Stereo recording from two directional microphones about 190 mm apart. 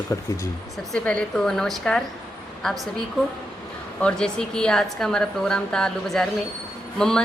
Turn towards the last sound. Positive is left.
turn(degrees=5)  # may be behind; listen again after turning